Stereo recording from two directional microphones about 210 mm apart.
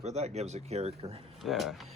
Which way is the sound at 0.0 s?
30° right (ahead or behind).